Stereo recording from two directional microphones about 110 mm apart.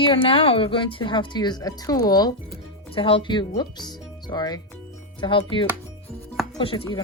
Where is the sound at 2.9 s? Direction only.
55° left (ahead or behind).